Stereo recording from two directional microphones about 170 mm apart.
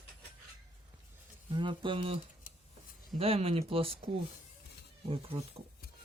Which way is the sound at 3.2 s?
35° right (ahead or behind).